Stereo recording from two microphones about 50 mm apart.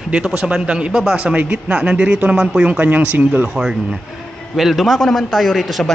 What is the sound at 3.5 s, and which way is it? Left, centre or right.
A man's voice, centre.